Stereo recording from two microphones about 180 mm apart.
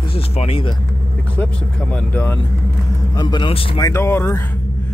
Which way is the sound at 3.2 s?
25° left (ahead or behind).